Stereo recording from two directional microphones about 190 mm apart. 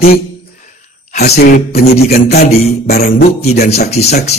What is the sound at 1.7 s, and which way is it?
Speech, 35° left (ahead or behind).